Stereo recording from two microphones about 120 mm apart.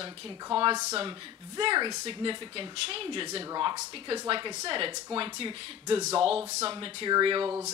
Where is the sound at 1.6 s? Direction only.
40° right (ahead or behind).